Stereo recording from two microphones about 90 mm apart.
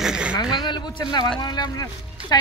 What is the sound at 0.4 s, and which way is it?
Speech, 55° left (ahead or behind).